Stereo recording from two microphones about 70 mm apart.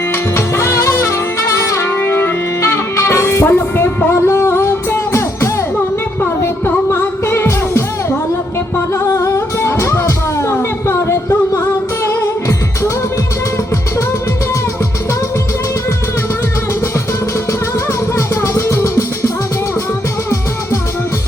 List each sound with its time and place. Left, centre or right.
0.3 s music: left
1.9 s music: left
8.9 s music: left
18.1 s music: left